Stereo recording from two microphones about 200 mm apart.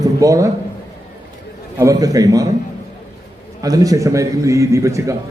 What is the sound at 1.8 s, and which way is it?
Speech, 15° right (ahead or behind).